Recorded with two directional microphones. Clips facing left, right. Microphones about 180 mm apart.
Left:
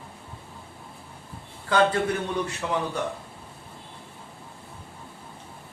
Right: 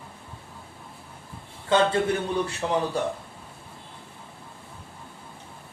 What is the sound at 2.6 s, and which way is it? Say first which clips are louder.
Speech: right 3 dB; 30° right (ahead or behind).